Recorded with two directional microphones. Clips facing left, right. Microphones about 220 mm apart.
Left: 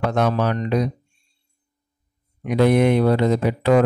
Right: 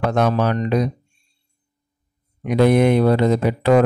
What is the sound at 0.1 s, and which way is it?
Speech, 45° right (ahead or behind).